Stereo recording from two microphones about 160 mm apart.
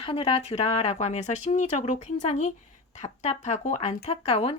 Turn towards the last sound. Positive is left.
turn(degrees=40)  # may be behind; listen again after turning